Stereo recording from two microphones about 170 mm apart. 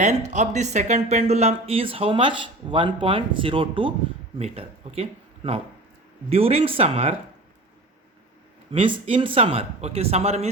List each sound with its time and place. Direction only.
0.0 s speech: 40° right (ahead or behind)
8.7 s speech: 30° right (ahead or behind)